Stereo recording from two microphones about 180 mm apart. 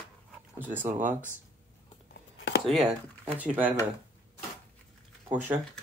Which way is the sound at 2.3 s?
80° left.